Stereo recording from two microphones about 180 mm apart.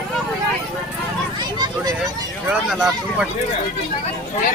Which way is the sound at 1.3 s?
25° right (ahead or behind).